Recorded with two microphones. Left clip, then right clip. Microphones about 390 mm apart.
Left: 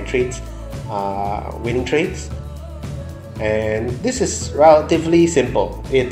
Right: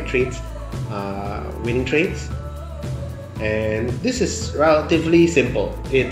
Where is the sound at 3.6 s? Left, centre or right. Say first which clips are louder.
Left 2 dB; centre.